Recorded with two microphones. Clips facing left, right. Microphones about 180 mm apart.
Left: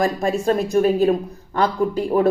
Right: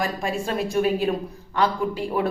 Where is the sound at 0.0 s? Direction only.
40° left (ahead or behind).